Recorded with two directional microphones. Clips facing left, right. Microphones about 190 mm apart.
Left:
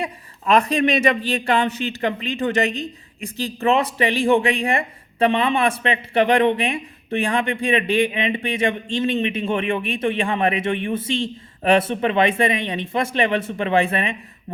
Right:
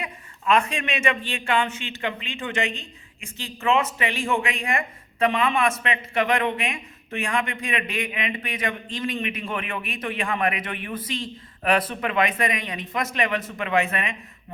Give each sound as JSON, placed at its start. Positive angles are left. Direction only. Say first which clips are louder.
{"t": 0.0, "sound": "speech", "louder": "left 4 dB", "side_deg": 35}